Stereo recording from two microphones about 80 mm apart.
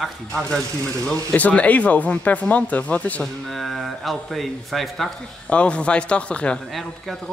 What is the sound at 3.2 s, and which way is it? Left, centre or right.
Speech, centre.